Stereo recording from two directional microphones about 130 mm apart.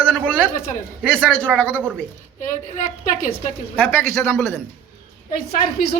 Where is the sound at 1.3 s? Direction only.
10° left (ahead or behind).